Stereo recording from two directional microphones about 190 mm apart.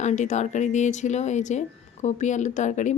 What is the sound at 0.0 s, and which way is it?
A woman's voice, 40° left (ahead or behind).